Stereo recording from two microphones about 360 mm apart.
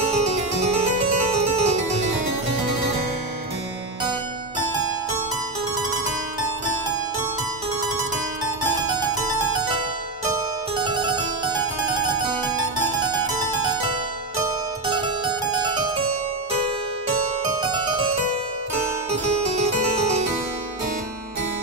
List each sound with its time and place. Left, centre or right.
1.3 s music: centre
10.8 s harpsichord: centre
17.6 s harpsichord: centre